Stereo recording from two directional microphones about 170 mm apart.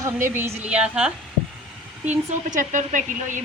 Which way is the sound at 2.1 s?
45° right (ahead or behind).